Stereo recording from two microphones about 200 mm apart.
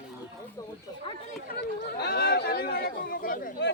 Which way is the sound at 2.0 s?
50° left (ahead or behind).